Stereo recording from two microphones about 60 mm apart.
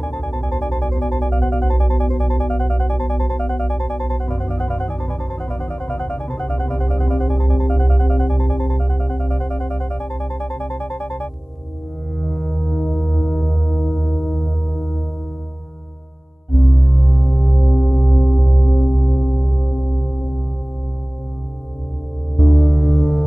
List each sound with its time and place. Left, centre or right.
0.0 s music: centre
12.2 s music: centre
16.6 s music: centre
22.5 s gong: centre